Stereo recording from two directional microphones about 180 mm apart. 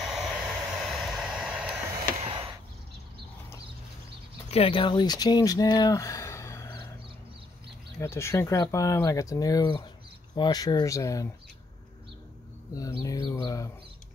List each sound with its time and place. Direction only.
0.0 s vehicle: centre (ahead or behind)
2.1 s a sound: 30° right (ahead or behind)
4.5 s speech: 30° left (ahead or behind); by 6.8 s 15° left (ahead or behind)
8.0 s speech: 15° left (ahead or behind)
13.3 s speech: 20° left (ahead or behind)